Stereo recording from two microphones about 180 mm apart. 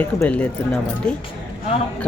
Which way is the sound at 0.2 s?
5° left (ahead or behind).